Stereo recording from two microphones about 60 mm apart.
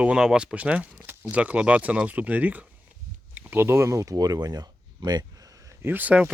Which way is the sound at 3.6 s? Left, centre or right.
Right.